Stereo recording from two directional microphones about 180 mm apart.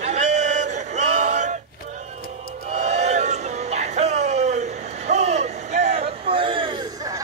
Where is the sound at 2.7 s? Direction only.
40° right (ahead or behind).